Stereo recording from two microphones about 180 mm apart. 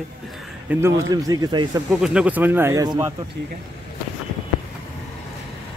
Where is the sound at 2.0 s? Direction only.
5° right (ahead or behind); by 3.1 s 20° right (ahead or behind).